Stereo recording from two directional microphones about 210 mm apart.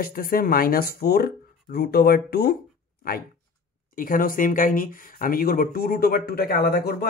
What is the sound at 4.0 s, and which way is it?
Speech, 45° left (ahead or behind).